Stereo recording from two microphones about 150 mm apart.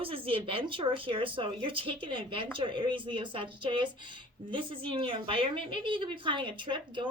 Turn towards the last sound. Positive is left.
turn(degrees=-35)  # may be behind; listen again after turning